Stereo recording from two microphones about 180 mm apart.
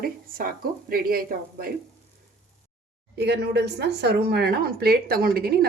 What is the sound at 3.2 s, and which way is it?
Speech, 65° right (ahead or behind).